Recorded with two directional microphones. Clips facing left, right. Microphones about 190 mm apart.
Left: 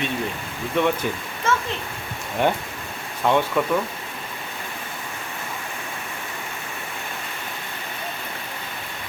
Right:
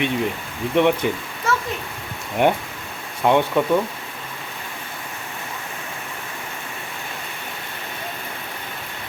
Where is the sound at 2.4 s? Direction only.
15° right (ahead or behind).